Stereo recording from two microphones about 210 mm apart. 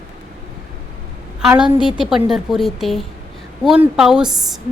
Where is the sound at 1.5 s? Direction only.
5° right (ahead or behind).